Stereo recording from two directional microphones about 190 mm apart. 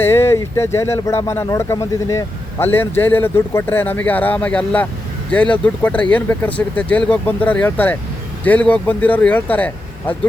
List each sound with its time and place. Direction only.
0.0 s speech: 10° left (ahead or behind)